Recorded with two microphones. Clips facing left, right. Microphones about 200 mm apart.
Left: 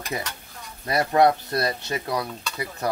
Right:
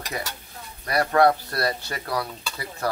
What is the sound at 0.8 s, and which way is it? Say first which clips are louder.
Speech: even; 20° left (ahead or behind).